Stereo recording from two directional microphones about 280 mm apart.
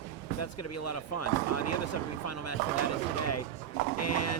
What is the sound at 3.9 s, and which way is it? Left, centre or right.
Speech, left.